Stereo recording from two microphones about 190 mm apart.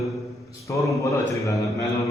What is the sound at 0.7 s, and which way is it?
Mantra, 15° left (ahead or behind).